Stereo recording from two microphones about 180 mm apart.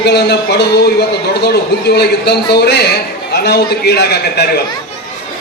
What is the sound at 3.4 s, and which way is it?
A man's voice, 65° left (ahead or behind).